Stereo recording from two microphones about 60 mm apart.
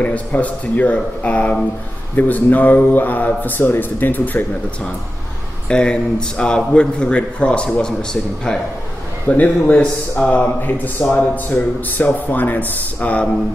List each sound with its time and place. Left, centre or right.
0.0 s a man's voice: left
5.7 s speech: centre
9.3 s speech: left